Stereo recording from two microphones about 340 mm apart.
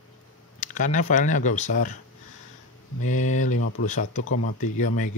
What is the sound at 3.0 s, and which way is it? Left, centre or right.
Speech, left.